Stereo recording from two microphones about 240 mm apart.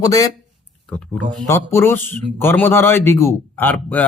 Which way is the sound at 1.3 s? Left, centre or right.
Centre.